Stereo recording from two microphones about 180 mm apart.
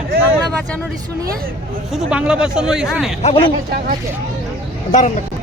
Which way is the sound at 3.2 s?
30° left (ahead or behind).